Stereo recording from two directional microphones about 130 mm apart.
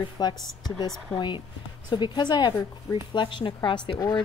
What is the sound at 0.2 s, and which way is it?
Speech, 30° left (ahead or behind).